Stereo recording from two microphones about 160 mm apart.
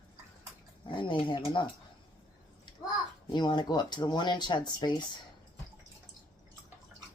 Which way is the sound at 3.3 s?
25° left (ahead or behind).